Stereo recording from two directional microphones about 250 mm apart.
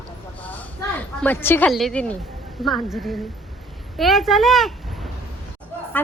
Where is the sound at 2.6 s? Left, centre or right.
Centre.